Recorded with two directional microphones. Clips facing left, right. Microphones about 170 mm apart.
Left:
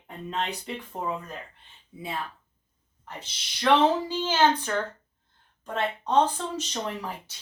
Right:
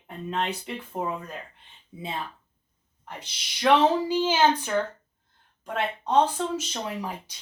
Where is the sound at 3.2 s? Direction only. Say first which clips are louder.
Right 2 dB; 10° right (ahead or behind).